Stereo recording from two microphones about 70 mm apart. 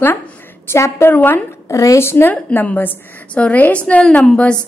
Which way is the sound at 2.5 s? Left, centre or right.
Left.